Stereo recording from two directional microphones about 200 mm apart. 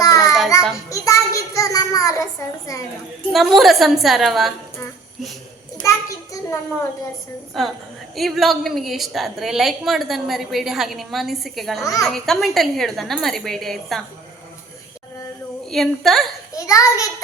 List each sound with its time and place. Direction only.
0.0 s child singing: 15° left (ahead or behind)
2.7 s a child's voice: 15° left (ahead or behind)
3.3 s a woman's voice: centre (ahead or behind)
5.7 s child singing: 15° left (ahead or behind)
7.6 s a woman's voice: centre (ahead or behind)
11.8 s a child's voice: 15° left (ahead or behind)
12.0 s a woman's voice: centre (ahead or behind)
15.7 s a woman's voice: centre (ahead or behind)
16.6 s a child's voice: 15° left (ahead or behind)